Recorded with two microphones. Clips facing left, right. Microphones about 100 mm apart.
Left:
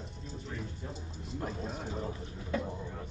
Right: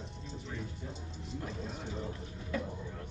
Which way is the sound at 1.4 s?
40° left (ahead or behind).